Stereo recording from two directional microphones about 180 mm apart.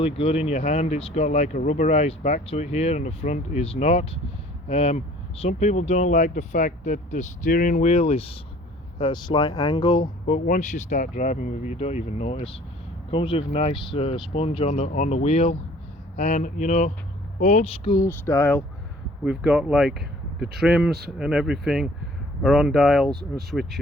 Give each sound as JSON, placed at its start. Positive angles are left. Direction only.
{"t": 0.0, "sound": "speech", "side_deg": 30}
{"t": 10.2, "sound": "speech", "side_deg": 45}
{"t": 17.9, "sound": "speech", "side_deg": 15}
{"t": 19.2, "sound": "speech", "side_deg": -5}